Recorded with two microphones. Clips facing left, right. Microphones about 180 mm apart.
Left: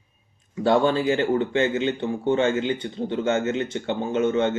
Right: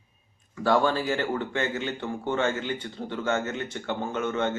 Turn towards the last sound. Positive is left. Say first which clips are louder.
# left 6 dB
turn(degrees=20)  # may be behind; listen again after turning